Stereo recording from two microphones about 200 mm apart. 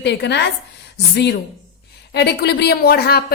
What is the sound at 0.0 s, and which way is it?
A woman's voice, 60° left (ahead or behind).